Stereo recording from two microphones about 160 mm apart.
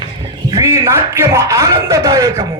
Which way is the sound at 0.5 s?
20° right (ahead or behind).